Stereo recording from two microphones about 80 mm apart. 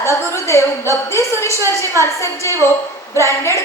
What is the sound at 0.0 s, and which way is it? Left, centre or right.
A woman's voice, left.